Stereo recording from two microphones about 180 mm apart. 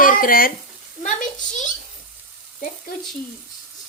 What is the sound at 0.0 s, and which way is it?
Speech, 50° left (ahead or behind).